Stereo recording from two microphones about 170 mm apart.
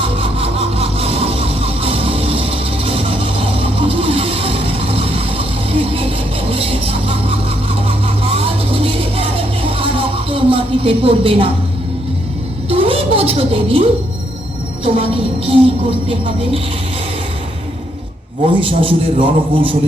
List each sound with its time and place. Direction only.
0.0 s sawing: 35° right (ahead or behind)
12.6 s a sound: 35° right (ahead or behind)
14.8 s a woman's voice: 35° right (ahead or behind)
18.4 s a woman's voice: 30° right (ahead or behind)